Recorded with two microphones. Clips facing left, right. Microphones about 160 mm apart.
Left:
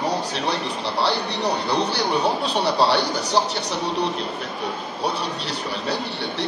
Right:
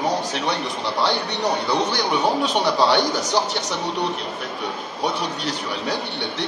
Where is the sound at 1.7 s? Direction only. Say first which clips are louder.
Right 1 dB; 80° right.